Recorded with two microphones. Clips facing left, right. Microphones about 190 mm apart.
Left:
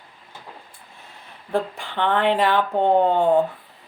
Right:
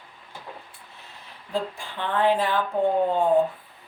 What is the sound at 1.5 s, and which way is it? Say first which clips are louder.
A woman's voice: left 5 dB; 70° left (ahead or behind).